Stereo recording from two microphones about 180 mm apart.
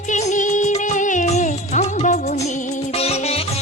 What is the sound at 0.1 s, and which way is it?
Music, 40° left (ahead or behind).